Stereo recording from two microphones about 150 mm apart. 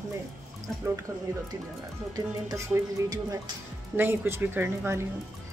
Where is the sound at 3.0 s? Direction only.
25° right (ahead or behind).